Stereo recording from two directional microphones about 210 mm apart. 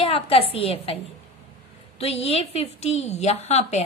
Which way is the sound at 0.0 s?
30° left (ahead or behind).